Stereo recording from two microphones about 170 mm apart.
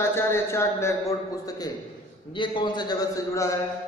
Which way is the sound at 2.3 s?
30° left (ahead or behind).